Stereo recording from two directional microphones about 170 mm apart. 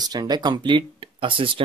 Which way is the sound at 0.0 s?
25° right (ahead or behind).